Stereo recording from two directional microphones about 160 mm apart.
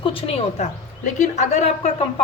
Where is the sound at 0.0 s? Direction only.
35° left (ahead or behind).